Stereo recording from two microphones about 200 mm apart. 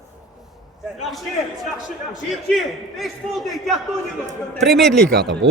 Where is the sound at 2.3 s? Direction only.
Centre (ahead or behind).